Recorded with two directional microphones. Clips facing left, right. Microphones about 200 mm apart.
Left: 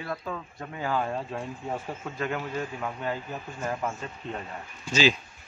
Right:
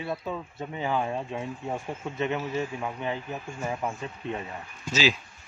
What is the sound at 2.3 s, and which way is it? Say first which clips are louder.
A man's voice: right 2 dB; 10° right (ahead or behind).